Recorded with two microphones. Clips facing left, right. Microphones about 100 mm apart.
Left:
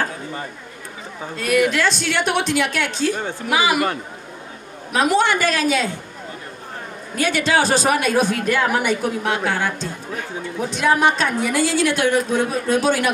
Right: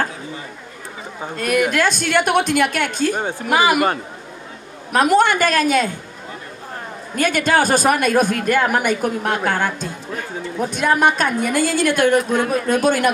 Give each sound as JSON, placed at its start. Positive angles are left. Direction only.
{"t": 1.4, "sound": "a woman's voice", "side_deg": -50}
{"t": 7.2, "sound": "a woman's voice", "side_deg": -50}